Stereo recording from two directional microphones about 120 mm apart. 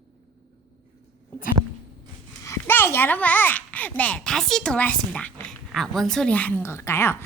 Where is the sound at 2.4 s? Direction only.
20° left (ahead or behind).